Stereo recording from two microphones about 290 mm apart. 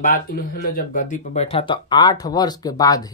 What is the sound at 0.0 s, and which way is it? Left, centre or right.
Speech, left.